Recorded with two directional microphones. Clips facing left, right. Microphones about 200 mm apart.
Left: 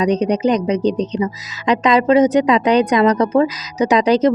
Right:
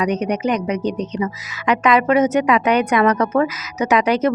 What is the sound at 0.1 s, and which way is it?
Speech, 35° left (ahead or behind).